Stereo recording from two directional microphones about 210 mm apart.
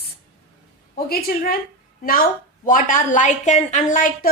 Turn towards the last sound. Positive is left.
turn(degrees=40)  # may be behind; listen again after turning